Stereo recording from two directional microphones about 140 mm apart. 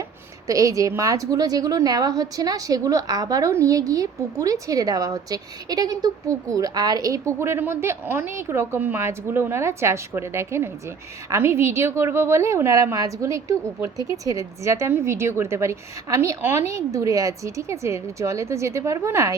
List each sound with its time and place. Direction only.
0.4 s a woman's voice: 25° right (ahead or behind)